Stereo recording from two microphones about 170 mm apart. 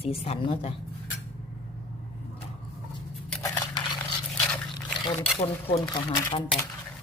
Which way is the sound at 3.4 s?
20° left (ahead or behind).